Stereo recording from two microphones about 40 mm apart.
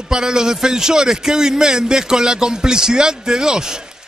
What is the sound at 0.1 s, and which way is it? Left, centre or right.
A man's voice, centre.